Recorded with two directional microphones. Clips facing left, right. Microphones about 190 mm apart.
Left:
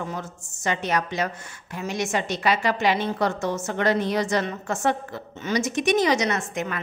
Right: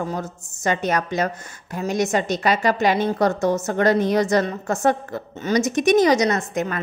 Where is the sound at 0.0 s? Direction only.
40° right (ahead or behind).